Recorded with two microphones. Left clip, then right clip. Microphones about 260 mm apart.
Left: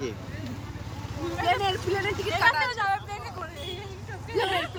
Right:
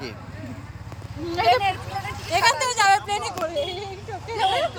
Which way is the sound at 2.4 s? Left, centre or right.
Right.